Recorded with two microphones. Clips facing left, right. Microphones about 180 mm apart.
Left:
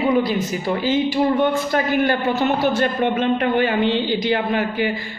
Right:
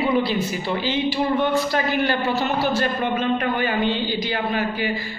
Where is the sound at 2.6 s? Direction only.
55° left (ahead or behind).